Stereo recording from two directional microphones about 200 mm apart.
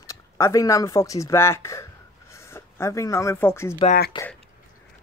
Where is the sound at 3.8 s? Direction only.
50° left (ahead or behind).